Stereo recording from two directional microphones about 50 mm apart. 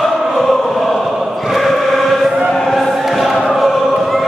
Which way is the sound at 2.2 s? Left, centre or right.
Centre.